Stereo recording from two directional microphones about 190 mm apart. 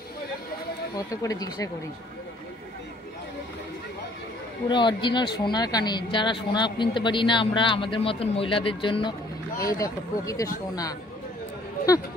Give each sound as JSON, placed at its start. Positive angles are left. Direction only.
{"t": 0.9, "sound": "speech", "side_deg": 20}
{"t": 4.6, "sound": "speech", "side_deg": 25}